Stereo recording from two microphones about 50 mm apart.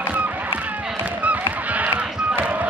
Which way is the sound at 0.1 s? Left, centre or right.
Right.